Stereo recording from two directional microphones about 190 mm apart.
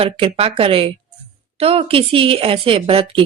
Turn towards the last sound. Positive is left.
turn(degrees=-30)  # may be behind; listen again after turning